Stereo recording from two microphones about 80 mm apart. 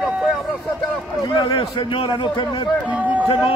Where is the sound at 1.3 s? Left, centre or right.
Left.